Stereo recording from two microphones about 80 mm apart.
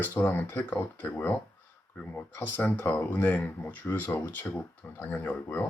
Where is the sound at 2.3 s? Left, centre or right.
Left.